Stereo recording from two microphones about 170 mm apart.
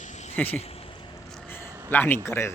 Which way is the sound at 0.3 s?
10° left (ahead or behind).